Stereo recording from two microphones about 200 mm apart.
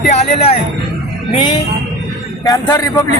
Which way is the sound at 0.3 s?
30° left (ahead or behind).